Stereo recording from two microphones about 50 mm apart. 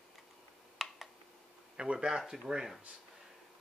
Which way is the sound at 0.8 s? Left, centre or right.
Centre.